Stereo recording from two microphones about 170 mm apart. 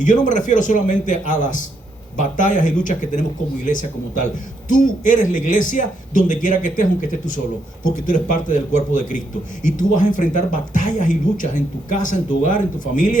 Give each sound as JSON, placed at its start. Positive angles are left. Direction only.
{"t": 0.0, "sound": "speech", "side_deg": 50}